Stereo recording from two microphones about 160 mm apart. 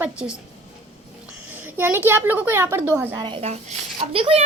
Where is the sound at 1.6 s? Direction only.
15° right (ahead or behind).